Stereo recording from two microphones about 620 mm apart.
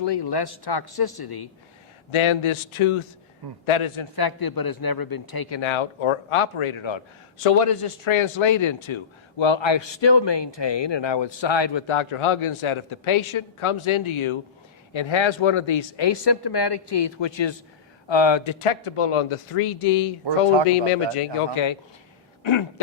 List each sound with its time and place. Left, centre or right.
0.0 s speech: left
2.0 s speech: left
4.1 s speech: left
21.5 s speech: left